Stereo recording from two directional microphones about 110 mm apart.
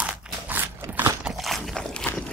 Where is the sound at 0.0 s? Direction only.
15° right (ahead or behind).